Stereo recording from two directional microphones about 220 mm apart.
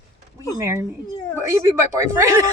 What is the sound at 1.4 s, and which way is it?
A woman's voice, 10° right (ahead or behind).